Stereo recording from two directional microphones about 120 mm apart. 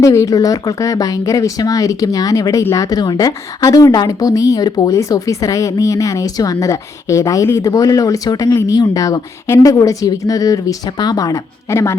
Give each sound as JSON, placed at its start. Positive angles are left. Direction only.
{"t": 0.0, "sound": "a woman's voice", "side_deg": 25}